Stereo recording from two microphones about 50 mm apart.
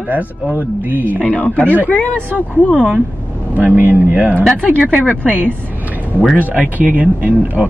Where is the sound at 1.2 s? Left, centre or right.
Left.